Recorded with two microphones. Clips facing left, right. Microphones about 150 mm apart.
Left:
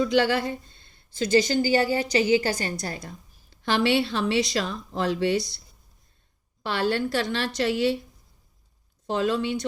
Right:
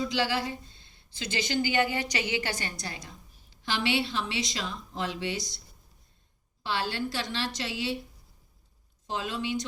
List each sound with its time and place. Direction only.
0.0 s speech: 55° left (ahead or behind)
6.6 s speech: 60° left (ahead or behind)
9.0 s speech: 65° left (ahead or behind)